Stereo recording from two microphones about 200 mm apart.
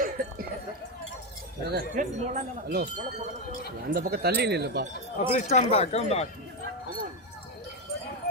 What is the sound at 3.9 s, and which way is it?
Speech, 50° right (ahead or behind).